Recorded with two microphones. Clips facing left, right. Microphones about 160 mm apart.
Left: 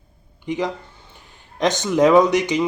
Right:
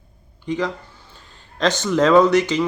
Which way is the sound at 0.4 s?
20° left (ahead or behind).